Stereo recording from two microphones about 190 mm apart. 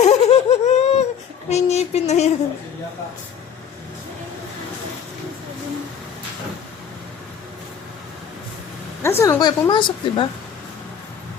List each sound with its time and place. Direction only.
0.0 s laughter: 35° left (ahead or behind)
1.5 s a sound: 35° left (ahead or behind)
9.0 s a woman's voice: 10° left (ahead or behind)